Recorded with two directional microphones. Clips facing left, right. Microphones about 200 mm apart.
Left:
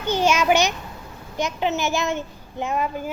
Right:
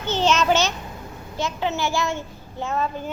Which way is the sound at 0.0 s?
10° left (ahead or behind).